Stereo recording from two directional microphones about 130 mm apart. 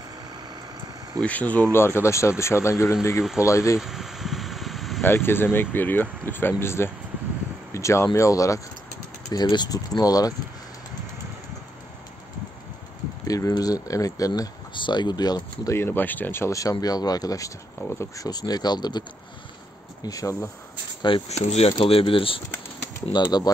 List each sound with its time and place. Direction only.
1.2 s speech: 10° left (ahead or behind)
3.8 s vehicle: 5° right (ahead or behind)
5.0 s speech: 15° left (ahead or behind)
13.3 s speech: 25° left (ahead or behind)
21.3 s speech: 55° left (ahead or behind)
21.8 s speech: 45° left (ahead or behind)
23.1 s speech: 30° left (ahead or behind)